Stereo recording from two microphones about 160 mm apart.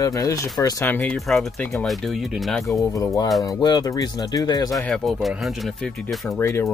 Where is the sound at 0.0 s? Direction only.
20° left (ahead or behind).